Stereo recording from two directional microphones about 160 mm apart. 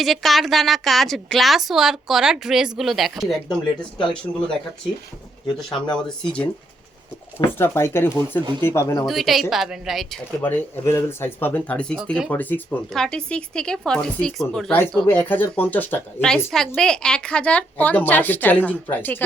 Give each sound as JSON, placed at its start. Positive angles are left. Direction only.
{"t": 0.0, "sound": "speech", "side_deg": 0}
{"t": 5.5, "sound": "a woman's voice", "side_deg": 5}
{"t": 9.0, "sound": "speech", "side_deg": 0}
{"t": 10.4, "sound": "speech", "side_deg": 15}
{"t": 15.0, "sound": "a woman's voice", "side_deg": 15}